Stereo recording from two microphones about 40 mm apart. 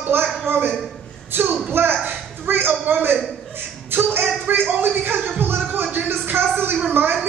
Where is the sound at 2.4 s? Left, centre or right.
Right.